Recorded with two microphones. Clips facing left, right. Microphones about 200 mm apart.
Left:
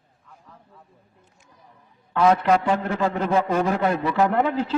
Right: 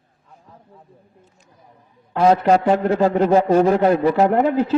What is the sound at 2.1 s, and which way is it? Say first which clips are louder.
A man's voice: right 3 dB; 30° right (ahead or behind).